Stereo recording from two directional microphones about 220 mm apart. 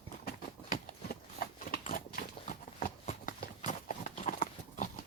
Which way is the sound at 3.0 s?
35° left (ahead or behind).